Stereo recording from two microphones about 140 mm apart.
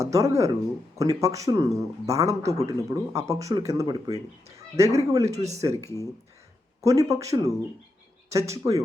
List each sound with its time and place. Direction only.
0.0 s speech: 20° right (ahead or behind)
5.3 s speech: 50° right (ahead or behind)
5.5 s speech: 25° right (ahead or behind)